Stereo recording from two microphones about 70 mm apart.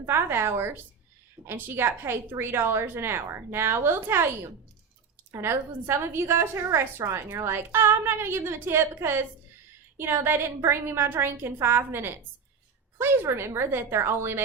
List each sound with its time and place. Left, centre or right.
0.0 s a woman's voice: right